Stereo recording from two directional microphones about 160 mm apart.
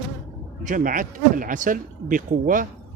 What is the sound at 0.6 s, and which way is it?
Speech, 55° right (ahead or behind).